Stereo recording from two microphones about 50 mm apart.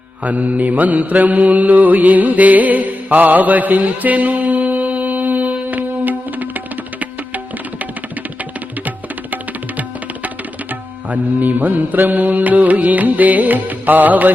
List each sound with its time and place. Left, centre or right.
0.2 s mantra: right
10.2 s music: right